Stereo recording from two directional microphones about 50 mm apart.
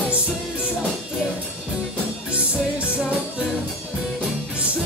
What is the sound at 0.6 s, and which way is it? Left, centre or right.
Music, centre.